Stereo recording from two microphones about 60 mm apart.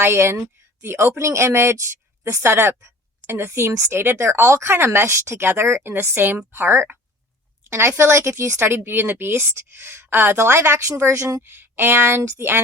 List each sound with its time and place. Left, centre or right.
0.0 s a woman's voice: right
7.7 s a woman's voice: right
11.4 s a woman's voice: right